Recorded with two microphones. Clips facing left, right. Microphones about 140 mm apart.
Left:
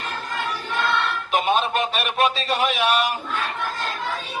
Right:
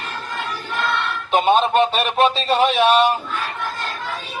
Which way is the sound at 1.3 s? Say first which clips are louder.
Right 6 dB; 30° right (ahead or behind).